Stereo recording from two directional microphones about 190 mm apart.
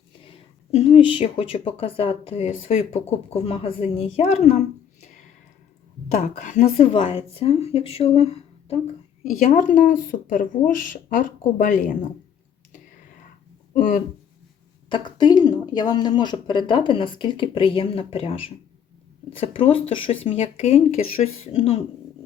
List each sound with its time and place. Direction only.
0.7 s a woman's voice: 30° left (ahead or behind)
6.1 s a woman's voice: 40° left (ahead or behind)
13.7 s speech: 40° left (ahead or behind)
14.8 s speech: 25° left (ahead or behind)
19.5 s a woman's voice: 30° left (ahead or behind)